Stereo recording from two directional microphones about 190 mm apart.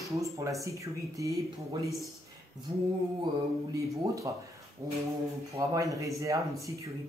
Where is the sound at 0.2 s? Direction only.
15° right (ahead or behind).